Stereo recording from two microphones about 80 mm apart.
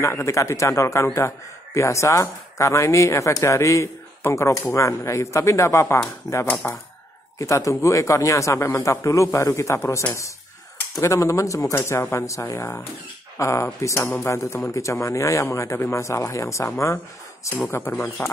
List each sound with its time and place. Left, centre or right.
0.0 s a man's voice: left
17.6 s speech: left